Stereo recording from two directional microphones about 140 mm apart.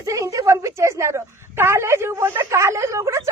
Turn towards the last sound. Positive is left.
turn(degrees=-20)  # may be behind; listen again after turning